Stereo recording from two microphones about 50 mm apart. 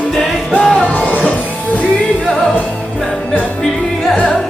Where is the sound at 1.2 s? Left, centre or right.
Left.